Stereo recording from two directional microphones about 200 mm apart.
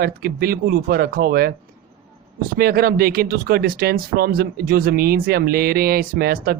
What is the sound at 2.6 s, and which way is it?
Speech, 50° right (ahead or behind).